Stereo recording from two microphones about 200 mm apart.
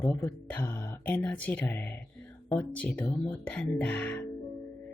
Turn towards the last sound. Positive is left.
turn(degrees=5)  # may be behind; listen again after turning